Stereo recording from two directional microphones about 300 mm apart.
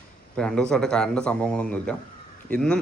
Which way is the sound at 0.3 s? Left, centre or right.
Centre.